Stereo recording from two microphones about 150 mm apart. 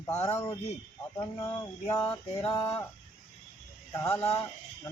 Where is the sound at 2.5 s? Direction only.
25° left (ahead or behind).